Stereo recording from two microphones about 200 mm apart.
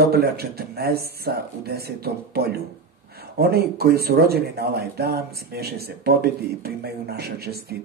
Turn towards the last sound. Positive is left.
turn(degrees=-50)  # may be behind; listen again after turning